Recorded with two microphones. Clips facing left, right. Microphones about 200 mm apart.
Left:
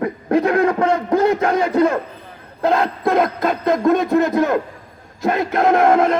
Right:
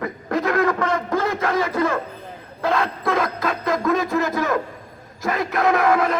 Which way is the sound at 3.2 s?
25° left (ahead or behind).